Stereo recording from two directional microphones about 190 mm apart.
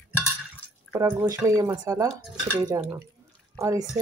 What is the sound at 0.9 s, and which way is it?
Speech, 15° right (ahead or behind).